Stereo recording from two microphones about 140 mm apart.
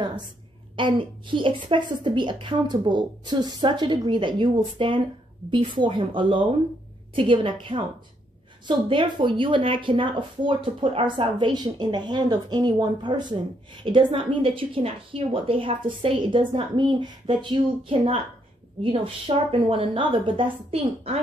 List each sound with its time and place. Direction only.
0.7 s speech: 35° right (ahead or behind)